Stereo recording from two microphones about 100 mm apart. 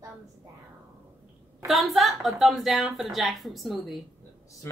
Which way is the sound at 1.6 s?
Centre (ahead or behind).